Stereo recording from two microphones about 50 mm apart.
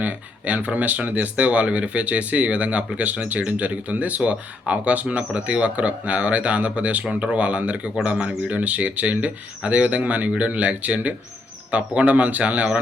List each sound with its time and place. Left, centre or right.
0.0 s speech: right